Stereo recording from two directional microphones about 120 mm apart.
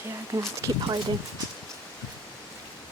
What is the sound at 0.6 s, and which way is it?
Speech, 35° right (ahead or behind).